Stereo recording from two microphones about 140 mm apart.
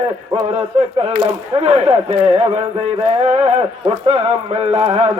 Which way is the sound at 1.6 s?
50° right (ahead or behind).